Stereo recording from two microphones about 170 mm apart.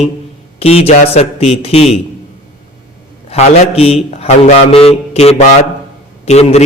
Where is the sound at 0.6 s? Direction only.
35° left (ahead or behind).